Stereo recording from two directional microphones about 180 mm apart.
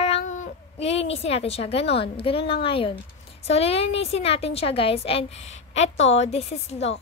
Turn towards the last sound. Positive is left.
turn(degrees=35)  # may be behind; listen again after turning